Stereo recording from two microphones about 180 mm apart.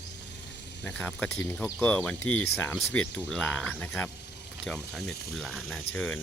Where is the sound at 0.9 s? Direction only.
10° left (ahead or behind).